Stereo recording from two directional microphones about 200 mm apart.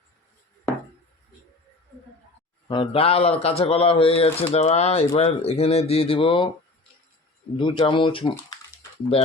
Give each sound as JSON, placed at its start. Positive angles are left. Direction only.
{"t": 2.6, "sound": "speech", "side_deg": 25}
{"t": 7.5, "sound": "speech", "side_deg": 25}